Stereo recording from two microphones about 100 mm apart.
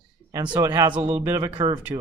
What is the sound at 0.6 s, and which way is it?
Speech, 35° right (ahead or behind).